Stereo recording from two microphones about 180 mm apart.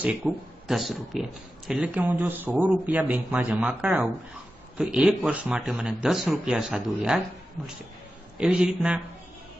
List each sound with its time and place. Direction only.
0.0 s speech: 5° right (ahead or behind)
8.4 s speech: 5° right (ahead or behind)